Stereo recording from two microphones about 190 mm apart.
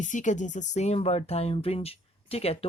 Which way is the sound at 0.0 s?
40° left (ahead or behind).